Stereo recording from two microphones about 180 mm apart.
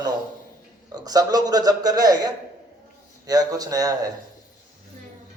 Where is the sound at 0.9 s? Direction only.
20° right (ahead or behind).